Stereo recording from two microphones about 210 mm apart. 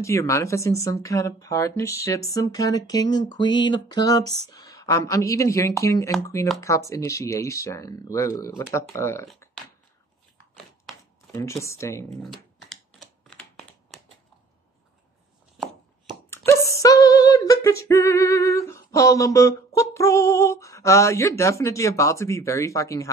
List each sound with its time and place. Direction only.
0.0 s speech: 15° left (ahead or behind)
11.3 s speech: 15° left (ahead or behind)
13.3 s a sound: centre (ahead or behind)
16.3 s female singing: 15° left (ahead or behind)